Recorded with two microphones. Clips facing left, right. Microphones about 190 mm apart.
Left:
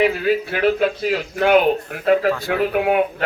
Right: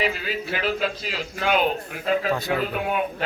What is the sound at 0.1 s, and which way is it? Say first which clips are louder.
Speech: left 9 dB; 55° left (ahead or behind).